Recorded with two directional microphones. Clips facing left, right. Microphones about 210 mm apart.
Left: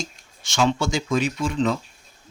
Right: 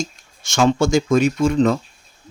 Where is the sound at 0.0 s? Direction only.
45° right (ahead or behind).